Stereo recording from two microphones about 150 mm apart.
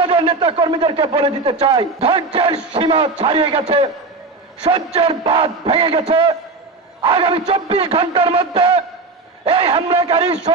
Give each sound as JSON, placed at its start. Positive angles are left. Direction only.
{"t": 0.0, "sound": "a man's voice", "side_deg": -45}